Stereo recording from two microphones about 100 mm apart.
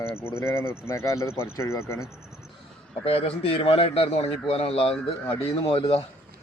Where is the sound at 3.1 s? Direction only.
80° left.